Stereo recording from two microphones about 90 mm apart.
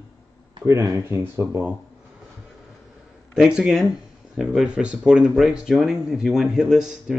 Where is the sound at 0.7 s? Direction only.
35° right (ahead or behind).